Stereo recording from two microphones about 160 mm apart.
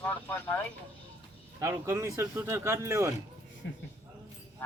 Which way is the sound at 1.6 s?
15° right (ahead or behind).